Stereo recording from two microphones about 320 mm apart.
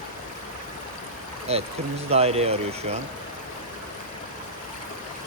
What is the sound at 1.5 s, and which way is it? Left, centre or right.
Speech, centre.